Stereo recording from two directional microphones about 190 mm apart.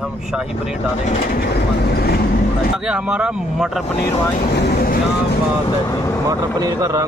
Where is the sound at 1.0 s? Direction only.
45° left (ahead or behind).